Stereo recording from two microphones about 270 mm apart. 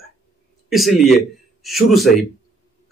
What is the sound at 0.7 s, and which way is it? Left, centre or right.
Speech, centre.